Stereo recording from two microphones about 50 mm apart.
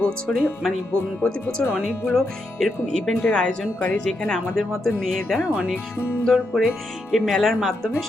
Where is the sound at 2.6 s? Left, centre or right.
Centre.